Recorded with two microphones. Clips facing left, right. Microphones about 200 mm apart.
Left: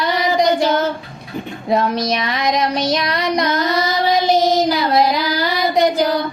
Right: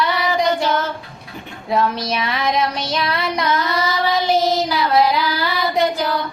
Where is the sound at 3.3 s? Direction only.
40° left (ahead or behind).